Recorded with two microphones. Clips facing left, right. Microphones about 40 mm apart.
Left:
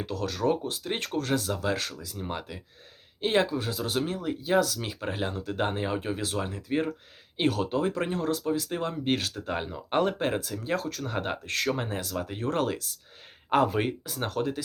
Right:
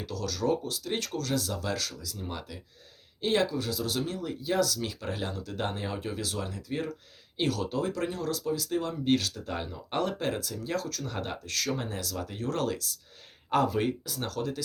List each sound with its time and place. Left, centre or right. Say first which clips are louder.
0.0 s speech: left 3 dB; left